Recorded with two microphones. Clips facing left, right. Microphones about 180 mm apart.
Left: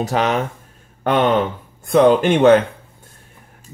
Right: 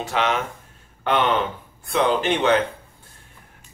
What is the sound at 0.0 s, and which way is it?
Speech, 40° left (ahead or behind).